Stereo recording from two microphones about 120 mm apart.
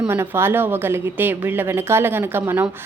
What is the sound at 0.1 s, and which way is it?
A woman's voice, 20° right (ahead or behind).